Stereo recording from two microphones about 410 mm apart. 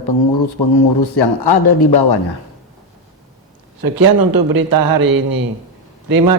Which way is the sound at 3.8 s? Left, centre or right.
Right.